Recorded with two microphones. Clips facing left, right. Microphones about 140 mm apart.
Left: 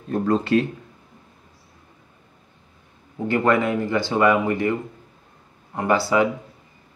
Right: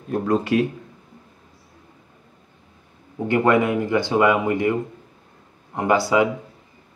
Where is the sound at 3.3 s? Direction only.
15° right (ahead or behind).